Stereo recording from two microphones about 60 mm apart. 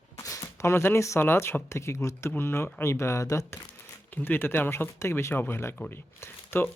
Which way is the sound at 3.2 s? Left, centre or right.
Left.